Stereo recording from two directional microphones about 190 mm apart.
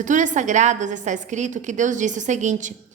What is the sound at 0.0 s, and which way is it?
A woman's voice, 40° right (ahead or behind).